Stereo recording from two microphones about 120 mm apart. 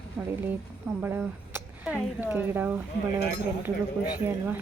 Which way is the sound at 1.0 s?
15° right (ahead or behind).